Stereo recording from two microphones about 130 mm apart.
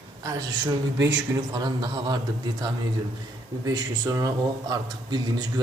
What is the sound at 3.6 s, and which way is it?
Speech, 30° right (ahead or behind).